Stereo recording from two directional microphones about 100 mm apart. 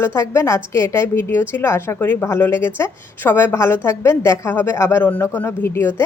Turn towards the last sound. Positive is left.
turn(degrees=25)  # may be behind; listen again after turning